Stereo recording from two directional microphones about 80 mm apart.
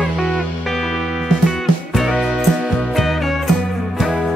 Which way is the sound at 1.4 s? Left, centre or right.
Centre.